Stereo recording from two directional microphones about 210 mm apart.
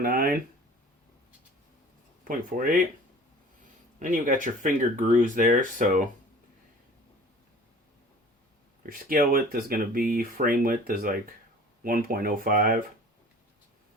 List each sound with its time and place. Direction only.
0.0 s speech: 45° right (ahead or behind)
2.2 s speech: 40° right (ahead or behind)
4.0 s speech: 40° right (ahead or behind)
8.9 s speech: 40° right (ahead or behind)